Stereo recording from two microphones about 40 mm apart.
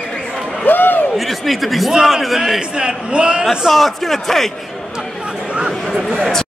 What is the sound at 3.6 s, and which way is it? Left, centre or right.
Speech, centre.